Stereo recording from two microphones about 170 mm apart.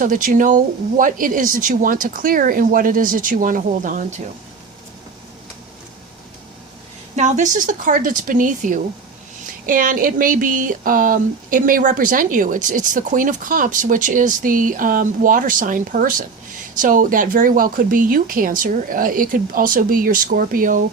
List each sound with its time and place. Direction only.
0.0 s speech: 55° right (ahead or behind)
7.2 s speech: 45° right (ahead or behind)